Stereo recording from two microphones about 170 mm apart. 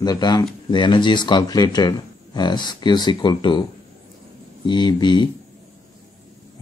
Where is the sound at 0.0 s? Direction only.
25° left (ahead or behind).